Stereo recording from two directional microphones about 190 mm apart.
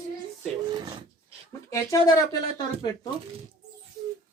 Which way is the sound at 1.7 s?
15° left (ahead or behind).